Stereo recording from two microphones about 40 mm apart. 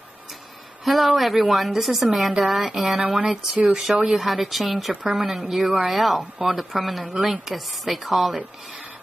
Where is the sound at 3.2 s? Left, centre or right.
Right.